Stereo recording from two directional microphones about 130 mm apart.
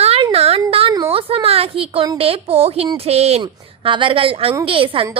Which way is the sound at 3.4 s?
40° right (ahead or behind).